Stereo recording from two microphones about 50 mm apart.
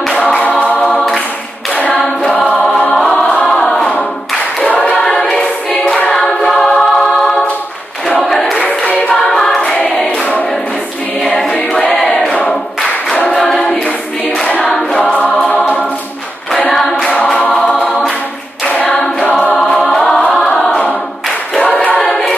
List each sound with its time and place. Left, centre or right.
0.1 s choir: left
0.7 s a capella: centre
2.9 s choir: centre
4.6 s choir: left
5.0 s choir: centre
8.2 s choir: centre
8.5 s singing: left
9.3 s choir: centre
12.0 s choir: centre
15.0 s choir: left
18.7 s choir: left
19.5 s choir: centre
21.5 s a capella: centre
21.9 s choir: centre